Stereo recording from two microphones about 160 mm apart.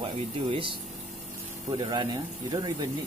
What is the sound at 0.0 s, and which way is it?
Speech, 30° right (ahead or behind).